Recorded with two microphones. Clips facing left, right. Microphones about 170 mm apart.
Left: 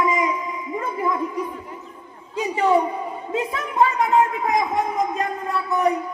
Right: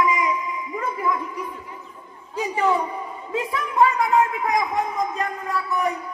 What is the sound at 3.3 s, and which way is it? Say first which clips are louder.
A woman's voice: even; 25° left (ahead or behind).